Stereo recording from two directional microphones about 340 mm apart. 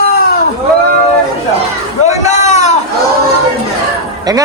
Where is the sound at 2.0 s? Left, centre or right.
Centre.